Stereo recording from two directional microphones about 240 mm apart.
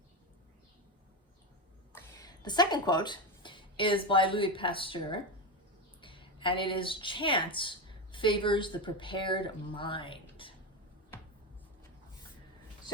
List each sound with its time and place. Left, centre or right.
1.9 s a woman's voice: centre